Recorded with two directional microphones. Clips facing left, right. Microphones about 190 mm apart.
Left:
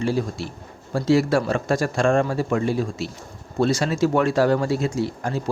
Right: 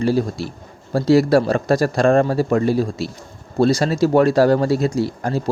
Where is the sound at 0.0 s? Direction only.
35° right (ahead or behind).